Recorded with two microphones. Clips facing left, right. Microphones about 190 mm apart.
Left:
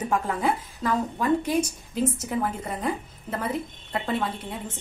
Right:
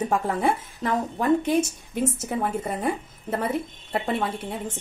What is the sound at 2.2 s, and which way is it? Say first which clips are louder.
A woman's voice: right 1 dB; 30° right (ahead or behind).